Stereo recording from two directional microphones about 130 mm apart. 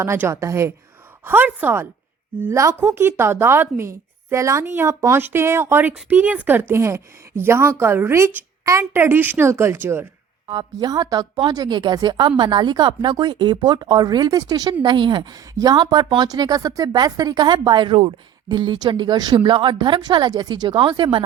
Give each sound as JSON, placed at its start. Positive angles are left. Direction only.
{"t": 0.0, "sound": "a woman's voice", "side_deg": -20}
{"t": 10.4, "sound": "speech", "side_deg": -35}